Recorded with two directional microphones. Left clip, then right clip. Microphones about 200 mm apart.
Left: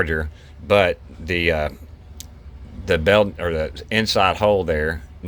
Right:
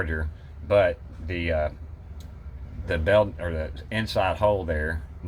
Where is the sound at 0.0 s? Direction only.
45° left (ahead or behind).